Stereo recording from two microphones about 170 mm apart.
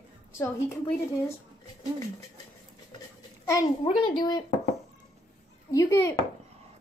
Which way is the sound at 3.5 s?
25° left (ahead or behind).